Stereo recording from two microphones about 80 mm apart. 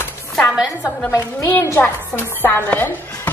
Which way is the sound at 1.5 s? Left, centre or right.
Left.